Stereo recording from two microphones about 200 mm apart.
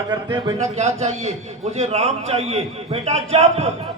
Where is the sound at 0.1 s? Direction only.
25° right (ahead or behind).